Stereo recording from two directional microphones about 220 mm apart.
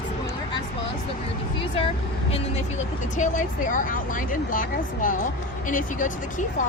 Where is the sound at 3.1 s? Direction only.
35° left (ahead or behind).